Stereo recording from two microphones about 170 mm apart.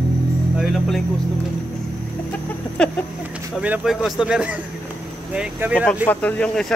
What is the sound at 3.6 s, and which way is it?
Speech, 5° right (ahead or behind).